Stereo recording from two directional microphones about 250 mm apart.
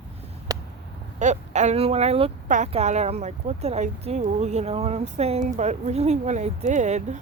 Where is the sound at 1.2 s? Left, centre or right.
Right.